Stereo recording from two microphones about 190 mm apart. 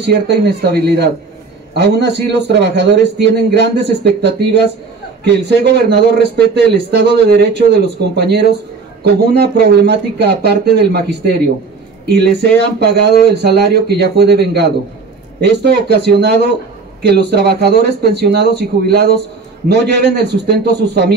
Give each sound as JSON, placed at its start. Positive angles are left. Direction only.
{"t": 0.0, "sound": "a man's voice", "side_deg": -60}